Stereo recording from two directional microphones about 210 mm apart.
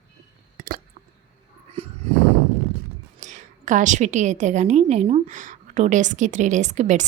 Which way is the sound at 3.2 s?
35° right (ahead or behind).